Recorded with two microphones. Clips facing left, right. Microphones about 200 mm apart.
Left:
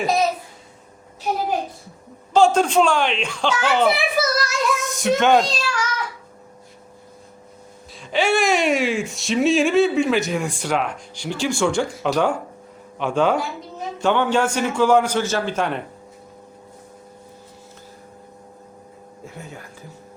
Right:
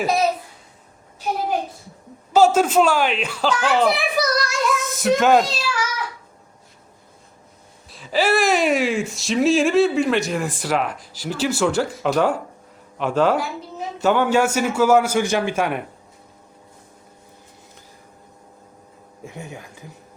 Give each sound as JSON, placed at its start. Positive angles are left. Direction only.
{"t": 2.3, "sound": "speech", "side_deg": -5}
{"t": 7.9, "sound": "a man's voice", "side_deg": 0}
{"t": 19.2, "sound": "a man's voice", "side_deg": -15}